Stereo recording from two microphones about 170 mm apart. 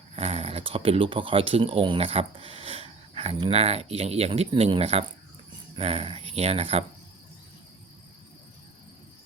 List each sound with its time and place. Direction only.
0.2 s speech: 35° right (ahead or behind)